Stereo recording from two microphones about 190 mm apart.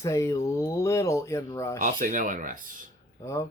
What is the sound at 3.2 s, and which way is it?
Speech, 15° left (ahead or behind).